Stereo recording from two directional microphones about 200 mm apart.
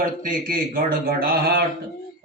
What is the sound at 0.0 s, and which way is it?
Speech, 45° right (ahead or behind).